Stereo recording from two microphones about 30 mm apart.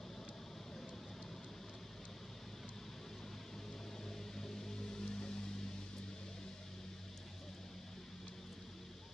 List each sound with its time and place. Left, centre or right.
4.4 s music: centre